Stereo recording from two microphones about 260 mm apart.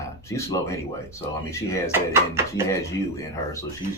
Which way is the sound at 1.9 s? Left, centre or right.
Centre.